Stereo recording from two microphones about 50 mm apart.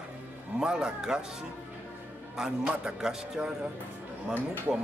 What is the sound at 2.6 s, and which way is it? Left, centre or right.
Speech, right.